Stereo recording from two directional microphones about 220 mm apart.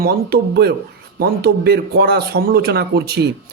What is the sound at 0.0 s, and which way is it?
Speech, 45° right (ahead or behind).